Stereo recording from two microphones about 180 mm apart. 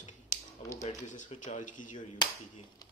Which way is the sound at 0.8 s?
40° left (ahead or behind).